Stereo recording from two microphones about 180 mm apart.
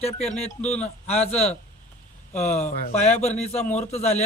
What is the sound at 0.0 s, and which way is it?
Speech, 35° left (ahead or behind).